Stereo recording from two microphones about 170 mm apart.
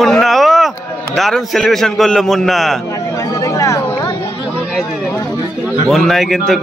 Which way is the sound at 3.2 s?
20° left (ahead or behind).